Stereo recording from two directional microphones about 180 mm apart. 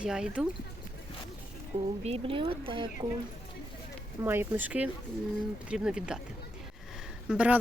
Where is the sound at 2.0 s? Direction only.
35° right (ahead or behind).